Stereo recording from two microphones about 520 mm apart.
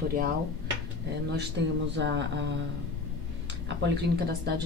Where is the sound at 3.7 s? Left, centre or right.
Centre.